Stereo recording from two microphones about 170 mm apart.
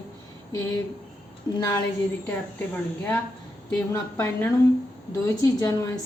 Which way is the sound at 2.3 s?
10° left (ahead or behind).